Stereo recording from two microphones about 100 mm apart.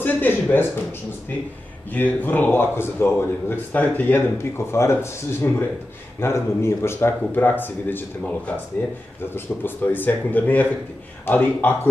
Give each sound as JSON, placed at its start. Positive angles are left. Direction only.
{"t": 0.0, "sound": "a sound", "side_deg": 15}
{"t": 1.9, "sound": "a man's voice", "side_deg": 15}
{"t": 9.3, "sound": "a man's voice", "side_deg": 20}